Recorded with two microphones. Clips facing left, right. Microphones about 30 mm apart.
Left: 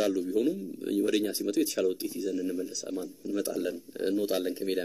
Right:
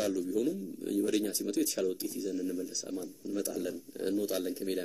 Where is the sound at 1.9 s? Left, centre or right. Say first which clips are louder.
Left 3 dB; left.